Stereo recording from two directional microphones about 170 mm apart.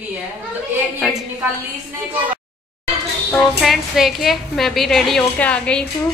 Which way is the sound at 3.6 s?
Centre (ahead or behind).